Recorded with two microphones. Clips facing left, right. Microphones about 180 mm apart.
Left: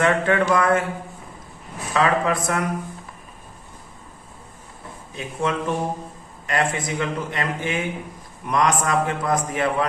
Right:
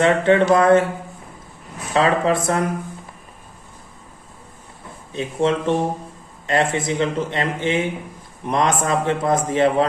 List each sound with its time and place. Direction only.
0.0 s speech: 25° right (ahead or behind)
1.9 s speech: 30° right (ahead or behind)
5.1 s speech: 30° right (ahead or behind)